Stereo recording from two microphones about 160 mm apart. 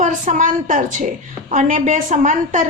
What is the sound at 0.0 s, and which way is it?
A woman's voice, 50° right (ahead or behind).